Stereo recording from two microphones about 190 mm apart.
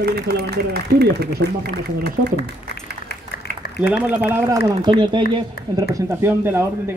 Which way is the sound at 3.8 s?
10° right (ahead or behind).